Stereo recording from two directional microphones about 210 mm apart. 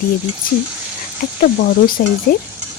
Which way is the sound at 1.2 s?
50° left (ahead or behind).